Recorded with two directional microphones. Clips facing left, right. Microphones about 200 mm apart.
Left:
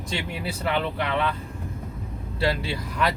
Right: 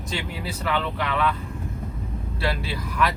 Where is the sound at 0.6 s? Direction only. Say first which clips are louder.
Even; 25° left (ahead or behind).